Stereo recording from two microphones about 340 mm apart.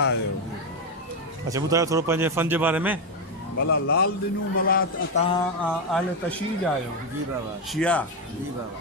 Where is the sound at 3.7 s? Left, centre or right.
Left.